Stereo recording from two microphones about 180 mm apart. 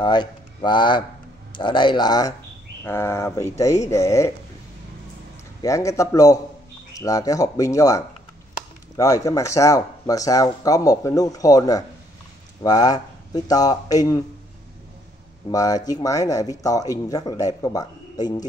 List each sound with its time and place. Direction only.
0.0 s speech: 25° left (ahead or behind)
5.6 s speech: 15° left (ahead or behind)
15.5 s speech: 20° left (ahead or behind)